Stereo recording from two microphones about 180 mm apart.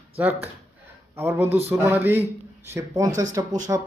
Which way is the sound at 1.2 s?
10° right (ahead or behind).